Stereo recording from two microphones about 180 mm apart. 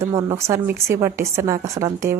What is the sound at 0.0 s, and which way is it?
A woman's voice, 20° right (ahead or behind).